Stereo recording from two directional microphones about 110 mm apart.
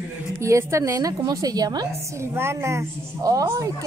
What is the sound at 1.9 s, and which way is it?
A woman's voice, 25° right (ahead or behind).